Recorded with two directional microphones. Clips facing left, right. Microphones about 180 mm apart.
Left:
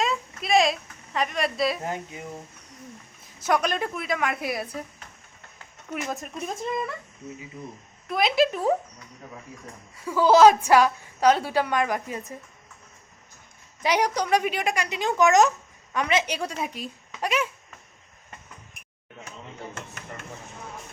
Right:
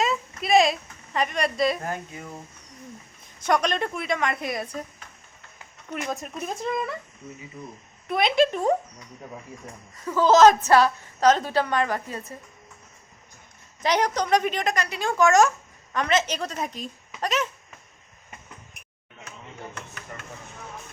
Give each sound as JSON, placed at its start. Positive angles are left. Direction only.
{"t": 0.0, "sound": "a sound", "side_deg": 0}
{"t": 1.8, "sound": "speech", "side_deg": 20}
{"t": 3.4, "sound": "a woman's voice", "side_deg": 5}
{"t": 5.9, "sound": "a woman's voice", "side_deg": 0}
{"t": 8.0, "sound": "a woman's voice", "side_deg": 0}
{"t": 9.9, "sound": "a woman's voice", "side_deg": 10}
{"t": 13.8, "sound": "a woman's voice", "side_deg": 10}